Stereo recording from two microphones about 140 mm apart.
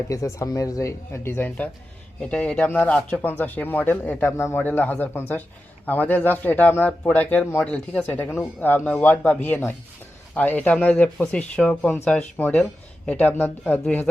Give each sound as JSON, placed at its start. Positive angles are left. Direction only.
{"t": 0.1, "sound": "speech", "side_deg": 20}